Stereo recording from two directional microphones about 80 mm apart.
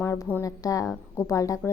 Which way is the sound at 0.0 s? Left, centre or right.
Left.